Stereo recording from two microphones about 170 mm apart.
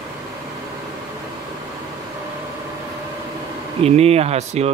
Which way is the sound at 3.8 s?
35° right (ahead or behind).